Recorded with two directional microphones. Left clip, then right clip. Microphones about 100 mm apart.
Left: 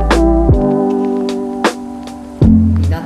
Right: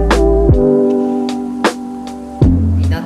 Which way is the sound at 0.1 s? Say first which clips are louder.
Left 1 dB; centre (ahead or behind).